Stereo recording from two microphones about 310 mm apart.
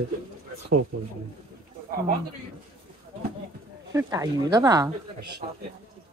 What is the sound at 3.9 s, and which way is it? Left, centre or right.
Speech, centre.